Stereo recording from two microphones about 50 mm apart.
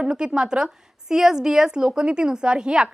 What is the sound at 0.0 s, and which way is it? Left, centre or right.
A woman's voice, centre.